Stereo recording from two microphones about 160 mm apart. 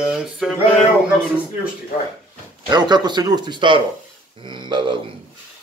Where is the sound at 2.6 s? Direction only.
25° right (ahead or behind).